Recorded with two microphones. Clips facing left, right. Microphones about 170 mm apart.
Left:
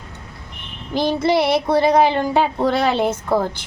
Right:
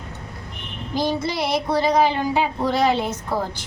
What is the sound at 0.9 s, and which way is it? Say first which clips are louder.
Child singing: left 6 dB; 60° left (ahead or behind).